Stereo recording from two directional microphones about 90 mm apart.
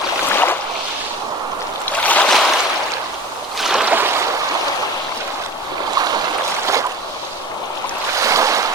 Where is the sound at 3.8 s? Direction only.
20° right (ahead or behind).